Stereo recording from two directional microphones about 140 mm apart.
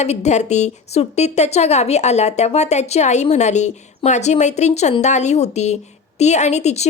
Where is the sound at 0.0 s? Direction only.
55° left (ahead or behind).